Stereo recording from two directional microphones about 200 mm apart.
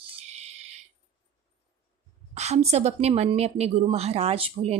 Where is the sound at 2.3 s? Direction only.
35° right (ahead or behind).